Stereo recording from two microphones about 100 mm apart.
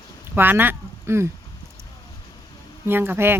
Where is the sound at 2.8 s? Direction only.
20° right (ahead or behind).